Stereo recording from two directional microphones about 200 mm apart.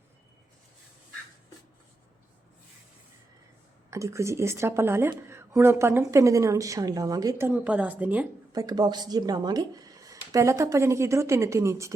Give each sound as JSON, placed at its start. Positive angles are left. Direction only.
{"t": 3.8, "sound": "speech", "side_deg": -15}
{"t": 8.5, "sound": "speech", "side_deg": -20}